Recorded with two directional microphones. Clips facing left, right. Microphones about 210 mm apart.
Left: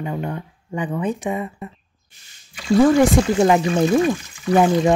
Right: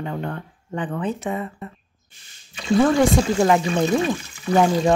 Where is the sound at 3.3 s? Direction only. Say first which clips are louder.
Left 2 dB; 20° left (ahead or behind).